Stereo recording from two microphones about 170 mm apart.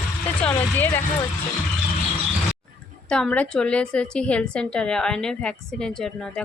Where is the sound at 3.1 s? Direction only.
5° left (ahead or behind).